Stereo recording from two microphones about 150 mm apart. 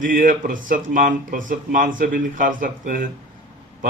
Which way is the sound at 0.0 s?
60° right (ahead or behind).